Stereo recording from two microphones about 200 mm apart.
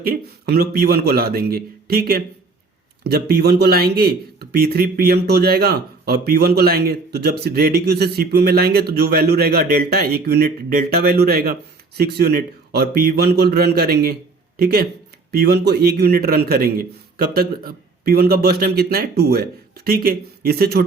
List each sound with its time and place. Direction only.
0.0 s speech: 50° right (ahead or behind)